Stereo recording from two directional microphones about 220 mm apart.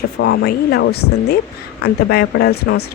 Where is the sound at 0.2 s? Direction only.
50° left (ahead or behind).